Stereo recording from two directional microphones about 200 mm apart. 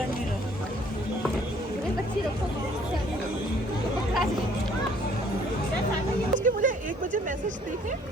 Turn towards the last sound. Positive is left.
turn(degrees=-40)  # may be behind; listen again after turning